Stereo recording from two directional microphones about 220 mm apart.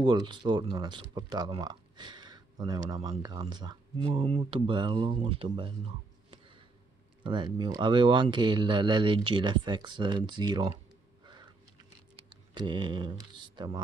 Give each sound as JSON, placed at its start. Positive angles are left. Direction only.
{"t": 0.0, "sound": "speech", "side_deg": -20}
{"t": 7.2, "sound": "speech", "side_deg": -20}
{"t": 12.5, "sound": "speech", "side_deg": -20}